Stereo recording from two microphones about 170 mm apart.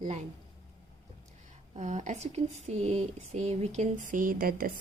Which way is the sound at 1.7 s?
45° right (ahead or behind).